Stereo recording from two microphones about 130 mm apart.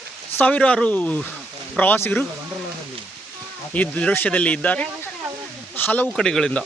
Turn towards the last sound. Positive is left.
turn(degrees=5)  # may be behind; listen again after turning